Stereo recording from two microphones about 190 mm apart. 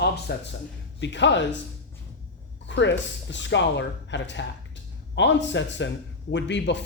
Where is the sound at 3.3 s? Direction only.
70° left (ahead or behind).